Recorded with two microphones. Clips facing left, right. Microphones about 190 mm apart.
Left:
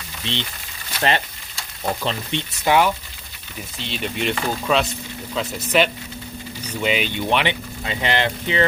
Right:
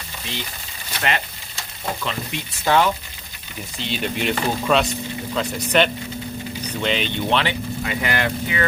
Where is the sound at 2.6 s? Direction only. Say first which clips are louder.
Left 1 dB; 10° left (ahead or behind).